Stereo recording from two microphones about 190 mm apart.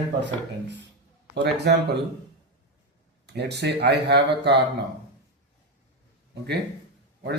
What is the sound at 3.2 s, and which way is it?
Speech, 60° right (ahead or behind).